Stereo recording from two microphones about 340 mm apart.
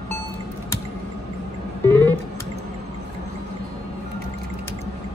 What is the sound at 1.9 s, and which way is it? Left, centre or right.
Music, centre.